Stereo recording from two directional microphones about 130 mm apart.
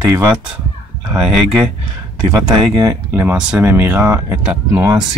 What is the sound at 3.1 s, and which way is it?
Speech, 15° right (ahead or behind).